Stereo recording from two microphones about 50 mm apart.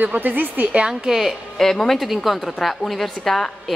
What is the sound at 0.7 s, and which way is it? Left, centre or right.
Speech, centre.